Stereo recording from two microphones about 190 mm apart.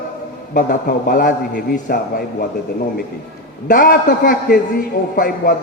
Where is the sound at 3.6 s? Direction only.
50° left (ahead or behind).